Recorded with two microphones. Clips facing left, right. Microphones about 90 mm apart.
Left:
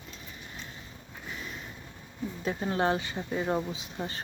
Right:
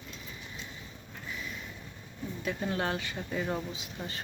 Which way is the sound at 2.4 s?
30° left (ahead or behind).